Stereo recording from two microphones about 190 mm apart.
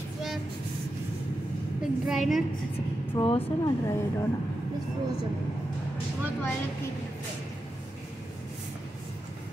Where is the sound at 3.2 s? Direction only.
20° left (ahead or behind).